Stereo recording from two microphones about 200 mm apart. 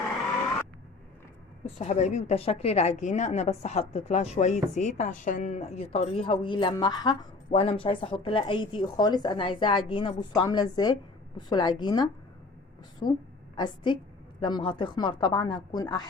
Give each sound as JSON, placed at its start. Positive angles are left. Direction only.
{"t": 1.6, "sound": "a woman's voice", "side_deg": 35}